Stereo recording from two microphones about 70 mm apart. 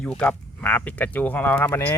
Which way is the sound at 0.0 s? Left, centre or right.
Left.